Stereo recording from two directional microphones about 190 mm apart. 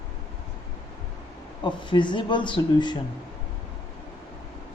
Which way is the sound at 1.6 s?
25° left (ahead or behind).